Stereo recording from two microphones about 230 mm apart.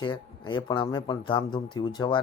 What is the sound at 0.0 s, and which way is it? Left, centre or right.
Speech, centre.